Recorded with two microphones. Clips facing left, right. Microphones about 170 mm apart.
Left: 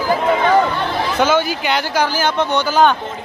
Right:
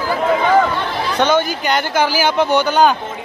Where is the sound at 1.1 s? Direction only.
5° left (ahead or behind).